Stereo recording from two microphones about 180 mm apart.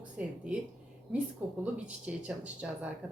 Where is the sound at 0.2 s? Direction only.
5° right (ahead or behind).